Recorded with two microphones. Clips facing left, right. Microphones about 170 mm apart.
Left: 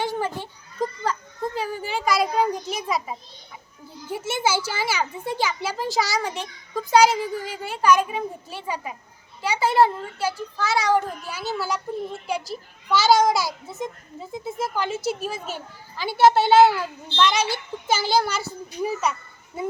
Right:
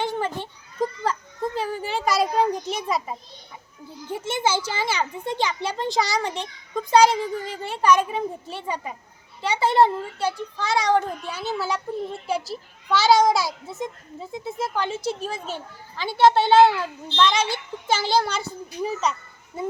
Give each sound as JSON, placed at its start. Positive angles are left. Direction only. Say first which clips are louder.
{"t": 0.0, "sound": "children playing", "louder": "even", "side_deg": 10}
{"t": 1.5, "sound": "a child's voice", "louder": "right 1 dB", "side_deg": 0}